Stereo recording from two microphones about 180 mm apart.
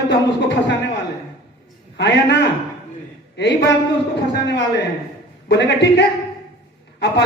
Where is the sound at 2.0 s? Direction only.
75° left (ahead or behind).